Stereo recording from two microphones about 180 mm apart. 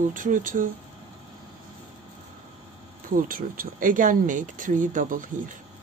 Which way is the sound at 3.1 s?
50° right (ahead or behind).